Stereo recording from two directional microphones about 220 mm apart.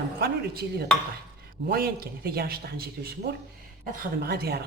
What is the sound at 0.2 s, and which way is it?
Speech, 45° right (ahead or behind).